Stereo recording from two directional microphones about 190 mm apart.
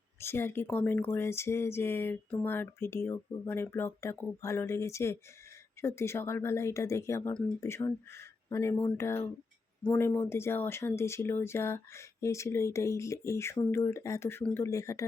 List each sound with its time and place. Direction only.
0.2 s speech: 10° left (ahead or behind)